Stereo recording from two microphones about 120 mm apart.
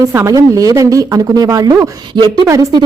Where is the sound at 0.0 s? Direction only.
25° right (ahead or behind).